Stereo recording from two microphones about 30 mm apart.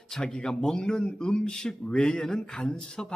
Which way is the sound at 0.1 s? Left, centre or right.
Left.